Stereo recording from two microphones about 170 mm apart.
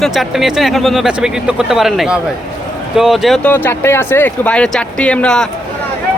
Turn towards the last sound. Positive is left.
turn(degrees=5)  # may be behind; listen again after turning